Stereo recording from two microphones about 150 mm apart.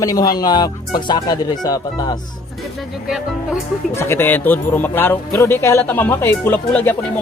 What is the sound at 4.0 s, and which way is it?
Speech, 15° left (ahead or behind).